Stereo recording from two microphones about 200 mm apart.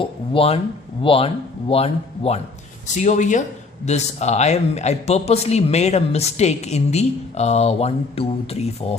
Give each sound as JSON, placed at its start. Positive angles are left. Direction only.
{"t": 0.0, "sound": "speech", "side_deg": 30}